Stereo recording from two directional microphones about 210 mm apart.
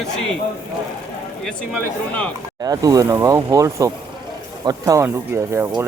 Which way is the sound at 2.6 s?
15° right (ahead or behind).